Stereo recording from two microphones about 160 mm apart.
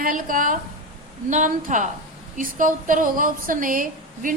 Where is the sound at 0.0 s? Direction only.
60° right (ahead or behind).